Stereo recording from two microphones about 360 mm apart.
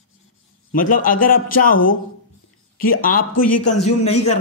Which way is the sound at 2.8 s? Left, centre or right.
Left.